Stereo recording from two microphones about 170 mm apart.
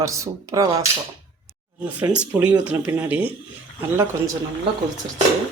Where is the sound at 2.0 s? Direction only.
10° right (ahead or behind).